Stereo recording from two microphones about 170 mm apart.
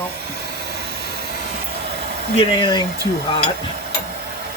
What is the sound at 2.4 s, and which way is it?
Speech, 30° left (ahead or behind).